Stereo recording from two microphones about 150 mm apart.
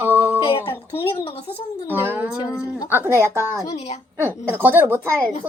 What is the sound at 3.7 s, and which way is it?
Speech, 45° left (ahead or behind).